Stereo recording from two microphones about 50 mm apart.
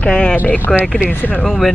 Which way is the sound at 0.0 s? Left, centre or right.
Centre.